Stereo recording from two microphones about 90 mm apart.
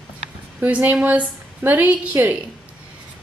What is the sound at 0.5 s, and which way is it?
A woman's voice, 15° right (ahead or behind).